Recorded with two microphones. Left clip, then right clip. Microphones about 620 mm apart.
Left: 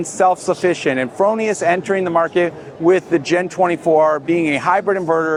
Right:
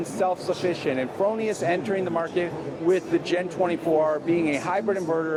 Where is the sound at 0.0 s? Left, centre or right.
Left.